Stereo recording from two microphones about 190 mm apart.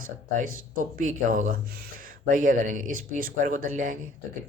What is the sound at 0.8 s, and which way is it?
Speech, 45° right (ahead or behind).